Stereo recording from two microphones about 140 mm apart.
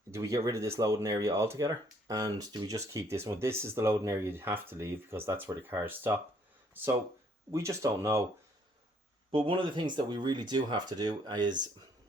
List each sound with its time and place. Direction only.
0.1 s speech: 20° right (ahead or behind)
7.5 s speech: 20° right (ahead or behind)
9.3 s speech: 40° right (ahead or behind)